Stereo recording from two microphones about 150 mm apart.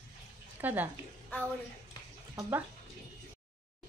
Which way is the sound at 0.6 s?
10° right (ahead or behind).